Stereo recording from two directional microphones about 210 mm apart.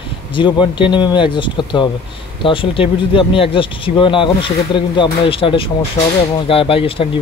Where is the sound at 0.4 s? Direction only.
25° left (ahead or behind).